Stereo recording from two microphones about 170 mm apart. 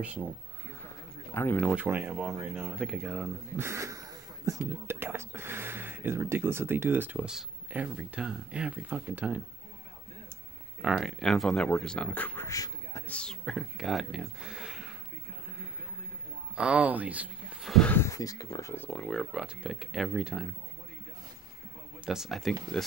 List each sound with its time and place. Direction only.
0.0 s speech: 5° right (ahead or behind)
1.3 s speech: 15° left (ahead or behind)
1.6 s speech: 5° right (ahead or behind)
3.5 s a sound: 15° right (ahead or behind)
4.6 s speech: 15° right (ahead or behind)
10.8 s speech: 5° right (ahead or behind); by 13.0 s 20° left (ahead or behind)
13.1 s speech: 5° left (ahead or behind)
16.5 s speech: 5° right (ahead or behind)
17.7 s speech: 10° left (ahead or behind)
18.9 s speech: centre (ahead or behind)
22.0 s speech: centre (ahead or behind)